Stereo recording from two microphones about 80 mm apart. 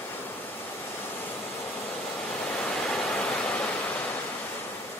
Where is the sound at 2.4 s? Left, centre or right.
Centre.